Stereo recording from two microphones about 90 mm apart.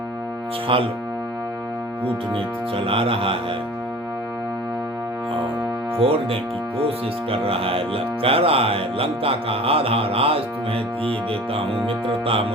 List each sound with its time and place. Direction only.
0.7 s speech: 90° right
2.3 s speech: 90° right
6.0 s speech: 90° right
11.5 s speech: 90° right